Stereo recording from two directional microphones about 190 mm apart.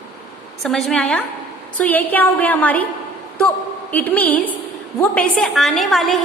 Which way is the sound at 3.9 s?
10° left (ahead or behind).